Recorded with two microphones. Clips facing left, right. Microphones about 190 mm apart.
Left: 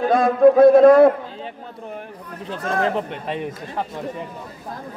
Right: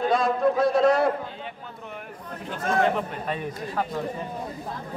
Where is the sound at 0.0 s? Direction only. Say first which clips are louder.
Left 8 dB; 50° left (ahead or behind).